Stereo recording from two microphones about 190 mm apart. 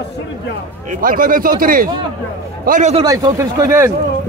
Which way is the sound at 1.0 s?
45° right (ahead or behind).